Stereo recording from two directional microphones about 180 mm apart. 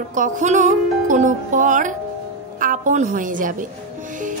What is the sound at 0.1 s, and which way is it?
A woman's voice, 45° right (ahead or behind).